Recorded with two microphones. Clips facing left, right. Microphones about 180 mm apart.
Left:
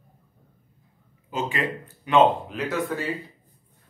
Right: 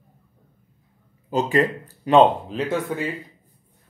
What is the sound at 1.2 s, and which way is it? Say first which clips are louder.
Speech: right 7 dB; 40° right (ahead or behind).